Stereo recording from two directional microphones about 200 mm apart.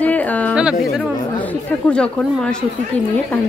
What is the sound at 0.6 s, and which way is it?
Speech, 5° right (ahead or behind).